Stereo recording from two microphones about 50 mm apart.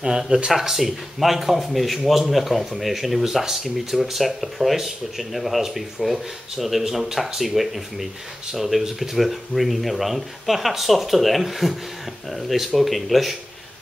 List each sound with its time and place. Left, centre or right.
0.0 s speech: centre